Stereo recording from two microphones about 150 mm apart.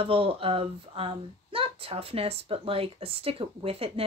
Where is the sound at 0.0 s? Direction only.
40° right (ahead or behind).